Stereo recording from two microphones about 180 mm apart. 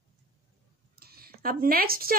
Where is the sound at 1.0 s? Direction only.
55° right (ahead or behind).